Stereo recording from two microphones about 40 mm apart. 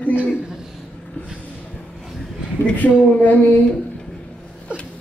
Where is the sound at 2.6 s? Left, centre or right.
Left.